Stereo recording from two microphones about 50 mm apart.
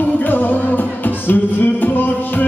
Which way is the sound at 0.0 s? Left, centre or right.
Left.